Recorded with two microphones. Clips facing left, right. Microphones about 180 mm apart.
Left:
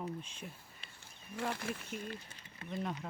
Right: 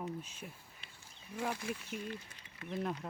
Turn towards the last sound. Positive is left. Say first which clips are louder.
# right 1 dB
turn(degrees=0)  # may be behind; listen again after turning